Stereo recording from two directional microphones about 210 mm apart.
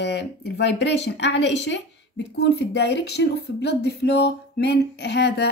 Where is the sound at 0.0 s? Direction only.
55° left (ahead or behind).